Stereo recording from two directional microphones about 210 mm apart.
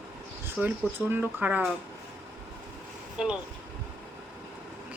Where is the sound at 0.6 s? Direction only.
5° right (ahead or behind).